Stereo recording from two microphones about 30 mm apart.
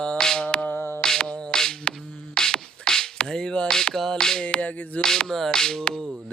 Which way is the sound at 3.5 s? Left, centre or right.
Left.